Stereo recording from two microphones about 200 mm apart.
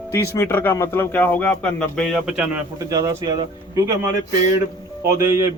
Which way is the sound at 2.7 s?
15° right (ahead or behind).